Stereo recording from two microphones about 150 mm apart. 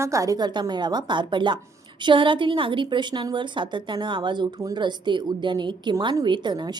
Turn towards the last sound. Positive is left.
turn(degrees=-30)  # may be behind; listen again after turning